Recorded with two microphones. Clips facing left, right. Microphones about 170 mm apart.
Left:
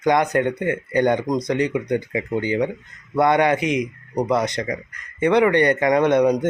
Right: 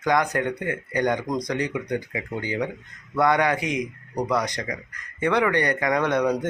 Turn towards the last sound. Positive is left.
turn(degrees=20)  # may be behind; listen again after turning